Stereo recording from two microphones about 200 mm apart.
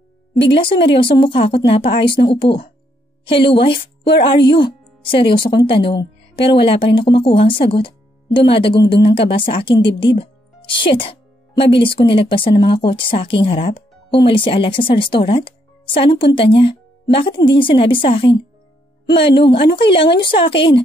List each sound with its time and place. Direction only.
0.4 s speech: 25° left (ahead or behind)
3.3 s speech: 25° left (ahead or behind)
19.5 s speech: 25° left (ahead or behind)